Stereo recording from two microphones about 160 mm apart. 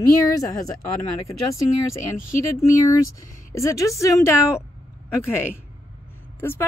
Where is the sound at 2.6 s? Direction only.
20° left (ahead or behind).